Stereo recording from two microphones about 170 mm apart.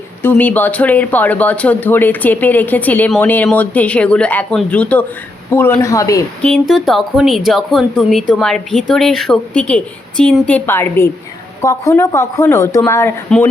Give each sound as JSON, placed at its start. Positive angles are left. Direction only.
{"t": 0.2, "sound": "speech", "side_deg": 10}
{"t": 6.4, "sound": "speech", "side_deg": 5}